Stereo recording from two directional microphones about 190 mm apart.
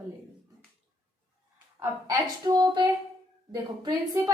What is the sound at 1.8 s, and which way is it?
A woman's voice, 20° right (ahead or behind).